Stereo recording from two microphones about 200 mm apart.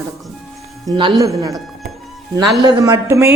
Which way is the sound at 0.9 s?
25° right (ahead or behind).